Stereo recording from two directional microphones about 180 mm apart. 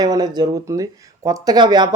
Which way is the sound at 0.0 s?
20° right (ahead or behind).